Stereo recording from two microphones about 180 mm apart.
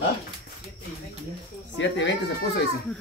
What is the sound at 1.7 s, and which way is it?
Speech, 85° left.